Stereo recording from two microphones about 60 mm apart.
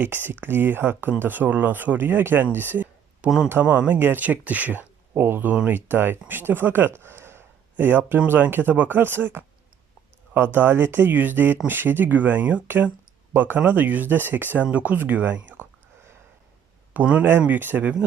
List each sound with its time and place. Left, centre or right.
0.0 s speech: right
3.2 s a man's voice: centre
3.6 s speech: right
7.0 s a sound: right
8.3 s speech: right
16.9 s speech: right